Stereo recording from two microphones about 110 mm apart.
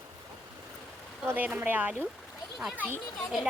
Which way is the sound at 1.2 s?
15° right (ahead or behind).